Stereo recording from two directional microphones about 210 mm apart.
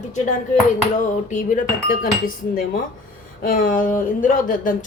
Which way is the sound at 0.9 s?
35° left (ahead or behind).